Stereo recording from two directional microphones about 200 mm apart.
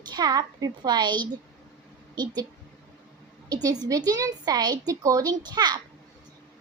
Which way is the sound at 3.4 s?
20° right (ahead or behind).